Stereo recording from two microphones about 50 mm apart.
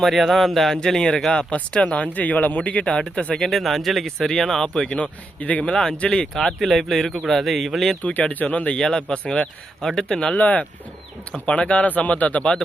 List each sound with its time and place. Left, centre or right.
0.0 s speech: centre
1.5 s speech: left
3.4 s speech: centre
4.9 s speech: left
5.6 s speech: centre
6.3 s speech: centre
8.0 s speech: left
9.8 s speech: centre
10.3 s speech: left